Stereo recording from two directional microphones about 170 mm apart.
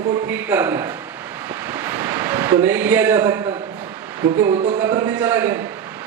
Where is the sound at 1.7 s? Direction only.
10° right (ahead or behind).